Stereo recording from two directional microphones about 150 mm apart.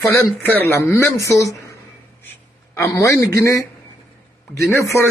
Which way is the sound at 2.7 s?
20° left (ahead or behind).